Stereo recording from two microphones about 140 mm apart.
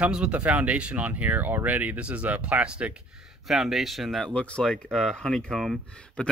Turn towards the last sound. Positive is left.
turn(degrees=5)  # may be behind; listen again after turning